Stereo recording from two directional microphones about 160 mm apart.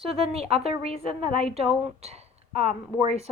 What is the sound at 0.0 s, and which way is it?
A woman's voice, 35° right (ahead or behind).